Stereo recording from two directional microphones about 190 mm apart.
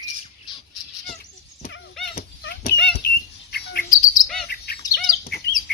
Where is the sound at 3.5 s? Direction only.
55° left (ahead or behind).